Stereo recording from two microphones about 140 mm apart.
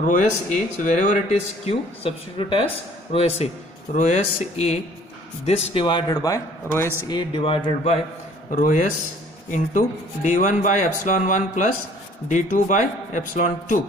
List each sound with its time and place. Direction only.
0.9 s speech: 60° left (ahead or behind)
3.9 s a man's voice: 60° left (ahead or behind); by 7.2 s 20° left (ahead or behind)
7.2 s a man's voice: 40° left (ahead or behind)
8.5 s a man's voice: 65° left (ahead or behind)